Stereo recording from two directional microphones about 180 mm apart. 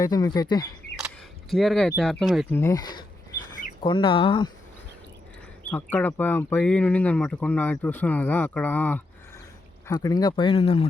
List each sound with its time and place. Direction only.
0.0 s speech: 20° left (ahead or behind)
0.9 s single-lens reflex camera: centre (ahead or behind)
2.0 s speech: centre (ahead or behind)
2.5 s speech: 15° left (ahead or behind)
5.7 s speech: 10° left (ahead or behind); by 10.8 s 30° left (ahead or behind)